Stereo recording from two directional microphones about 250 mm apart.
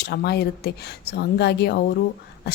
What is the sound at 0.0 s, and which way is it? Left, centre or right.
Speech, left.